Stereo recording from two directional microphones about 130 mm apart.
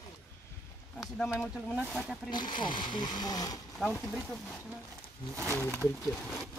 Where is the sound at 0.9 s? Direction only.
5° left (ahead or behind).